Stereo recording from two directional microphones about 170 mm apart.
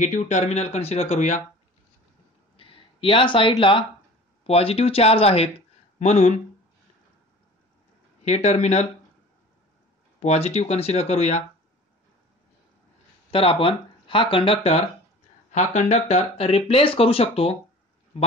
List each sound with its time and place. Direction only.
0.0 s speech: 45° left (ahead or behind)
2.5 s a sound: 30° left (ahead or behind)
4.5 s speech: 35° left (ahead or behind)
8.3 s speech: 40° left (ahead or behind)
10.2 s speech: 40° left (ahead or behind)
13.3 s speech: 30° left (ahead or behind)